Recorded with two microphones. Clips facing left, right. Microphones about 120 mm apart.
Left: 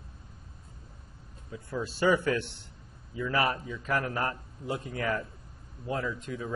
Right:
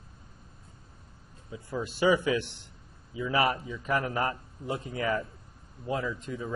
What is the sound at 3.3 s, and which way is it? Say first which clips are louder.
Speech: right 2 dB; 25° right (ahead or behind).